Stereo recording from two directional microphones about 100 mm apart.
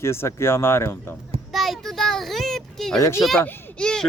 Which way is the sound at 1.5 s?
Centre (ahead or behind).